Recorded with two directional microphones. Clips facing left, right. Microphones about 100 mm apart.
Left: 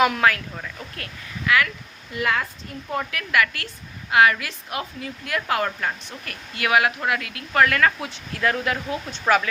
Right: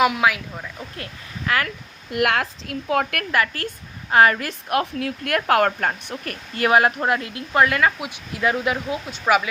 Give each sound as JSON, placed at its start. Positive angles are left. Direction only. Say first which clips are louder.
{"t": 0.0, "sound": "speech", "louder": "even", "side_deg": -5}
{"t": 1.5, "sound": "speech", "louder": "left 2 dB", "side_deg": -40}
{"t": 2.1, "sound": "a woman's voice", "louder": "right 4 dB", "side_deg": -70}
{"t": 3.3, "sound": "speech", "louder": "left 1 dB", "side_deg": -35}
{"t": 4.7, "sound": "speech", "louder": "right 9 dB", "side_deg": -60}